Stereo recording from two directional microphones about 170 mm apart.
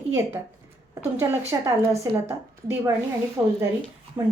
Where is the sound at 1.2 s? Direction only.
15° right (ahead or behind).